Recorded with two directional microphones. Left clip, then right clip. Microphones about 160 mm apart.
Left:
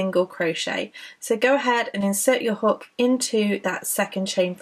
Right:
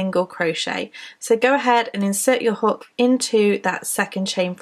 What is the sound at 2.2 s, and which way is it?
Speech, 30° right (ahead or behind).